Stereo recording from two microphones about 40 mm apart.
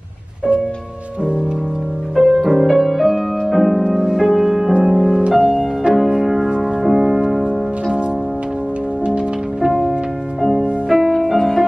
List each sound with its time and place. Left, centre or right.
2.1 s music: centre
9.7 s music: centre